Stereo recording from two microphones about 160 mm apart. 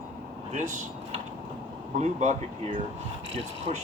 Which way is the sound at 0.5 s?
50° right (ahead or behind).